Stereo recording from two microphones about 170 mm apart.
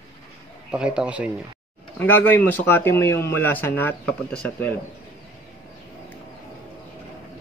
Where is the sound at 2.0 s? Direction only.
10° left (ahead or behind).